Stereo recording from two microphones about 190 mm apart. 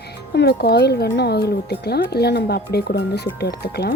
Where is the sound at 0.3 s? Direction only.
60° left (ahead or behind).